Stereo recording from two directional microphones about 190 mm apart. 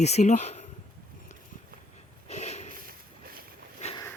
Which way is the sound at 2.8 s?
50° right (ahead or behind).